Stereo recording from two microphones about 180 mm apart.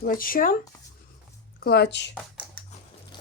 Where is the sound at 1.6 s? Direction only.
60° left (ahead or behind).